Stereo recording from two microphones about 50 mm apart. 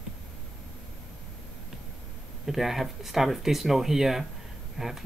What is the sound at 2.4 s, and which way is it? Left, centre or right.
Speech, centre.